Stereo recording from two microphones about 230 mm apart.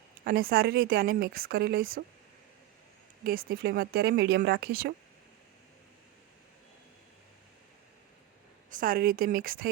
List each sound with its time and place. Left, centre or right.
0.3 s speech: right
3.2 s speech: right
8.7 s speech: right